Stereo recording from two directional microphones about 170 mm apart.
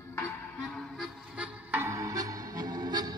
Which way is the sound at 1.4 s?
10° right (ahead or behind).